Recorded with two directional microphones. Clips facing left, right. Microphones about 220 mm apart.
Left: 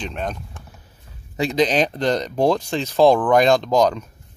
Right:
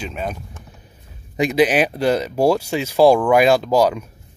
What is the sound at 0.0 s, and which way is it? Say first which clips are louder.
Speech: right 1 dB; 5° right (ahead or behind).